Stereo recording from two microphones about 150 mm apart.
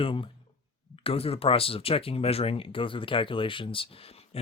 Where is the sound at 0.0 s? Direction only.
35° left (ahead or behind).